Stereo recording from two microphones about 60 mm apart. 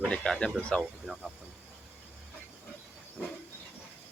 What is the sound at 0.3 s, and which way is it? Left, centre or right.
Speech, centre.